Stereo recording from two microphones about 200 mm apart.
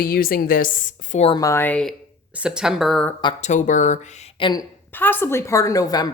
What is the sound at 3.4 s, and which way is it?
Speech, 40° left (ahead or behind).